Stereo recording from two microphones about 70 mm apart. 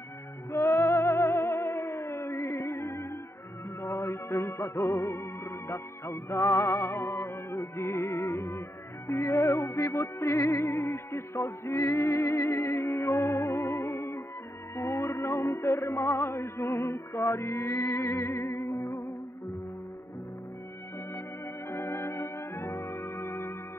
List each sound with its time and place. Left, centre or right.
0.5 s music: left
21.6 s music: left